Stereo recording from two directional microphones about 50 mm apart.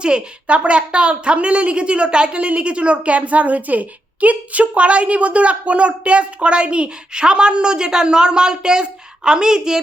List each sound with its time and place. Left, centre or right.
0.0 s a woman's voice: right